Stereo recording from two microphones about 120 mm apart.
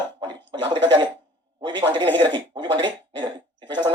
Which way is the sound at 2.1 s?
40° right (ahead or behind).